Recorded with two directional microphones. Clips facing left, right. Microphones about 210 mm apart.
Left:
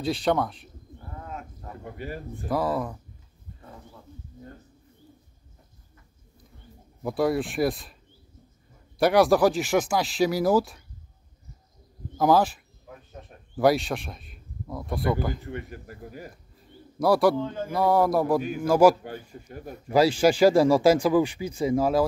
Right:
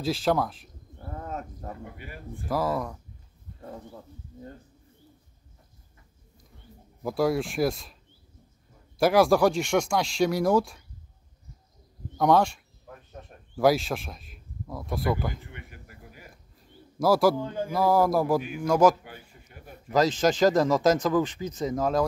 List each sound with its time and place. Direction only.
0.0 s speech: centre (ahead or behind)
1.1 s wild animals: 40° right (ahead or behind)
2.0 s speech: 40° left (ahead or behind)
2.4 s speech: centre (ahead or behind)
7.0 s speech: centre (ahead or behind)
12.2 s speech: 5° left (ahead or behind)
15.4 s speech: 40° left (ahead or behind)
17.0 s speech: centre (ahead or behind)
17.4 s a sound: 15° right (ahead or behind)
17.6 s speech: centre (ahead or behind)
19.0 s speech: 40° left (ahead or behind)
19.9 s speech: 10° left (ahead or behind)